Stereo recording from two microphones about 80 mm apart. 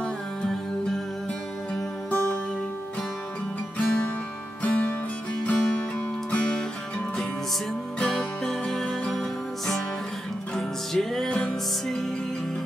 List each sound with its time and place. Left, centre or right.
2.0 s music: centre
3.7 s music: centre
8.0 s music: centre
10.5 s music: centre